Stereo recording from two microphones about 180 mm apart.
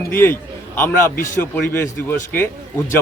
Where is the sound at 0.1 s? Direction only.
10° left (ahead or behind).